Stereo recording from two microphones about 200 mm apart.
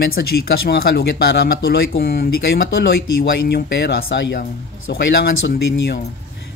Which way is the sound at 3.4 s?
50° left (ahead or behind).